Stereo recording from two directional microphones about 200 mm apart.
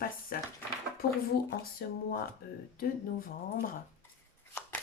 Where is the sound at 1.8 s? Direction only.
50° left (ahead or behind).